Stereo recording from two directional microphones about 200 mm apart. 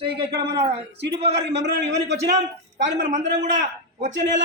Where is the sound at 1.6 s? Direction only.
55° right (ahead or behind).